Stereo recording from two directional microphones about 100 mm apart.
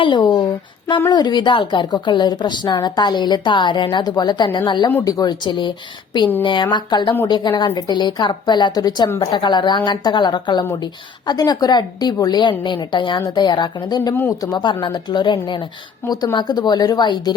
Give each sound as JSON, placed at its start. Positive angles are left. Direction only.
{"t": 0.0, "sound": "a woman's voice", "side_deg": 50}
{"t": 5.0, "sound": "a woman's voice", "side_deg": 40}
{"t": 14.1, "sound": "speech", "side_deg": 25}
{"t": 14.4, "sound": "a woman's voice", "side_deg": 45}